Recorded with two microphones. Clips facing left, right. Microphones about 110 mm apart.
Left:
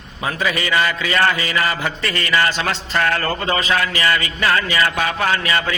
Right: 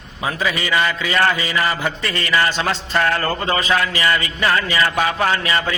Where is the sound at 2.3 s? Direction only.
5° right (ahead or behind).